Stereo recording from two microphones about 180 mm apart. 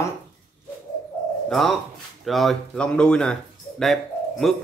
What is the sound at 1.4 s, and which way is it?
Speech, centre (ahead or behind).